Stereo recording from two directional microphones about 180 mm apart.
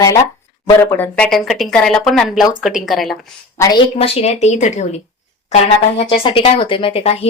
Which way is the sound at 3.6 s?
25° left (ahead or behind).